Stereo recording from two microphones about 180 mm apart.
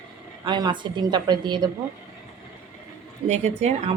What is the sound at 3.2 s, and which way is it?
Speech, 40° right (ahead or behind).